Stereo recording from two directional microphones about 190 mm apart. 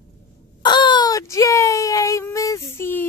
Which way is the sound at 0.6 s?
25° left (ahead or behind).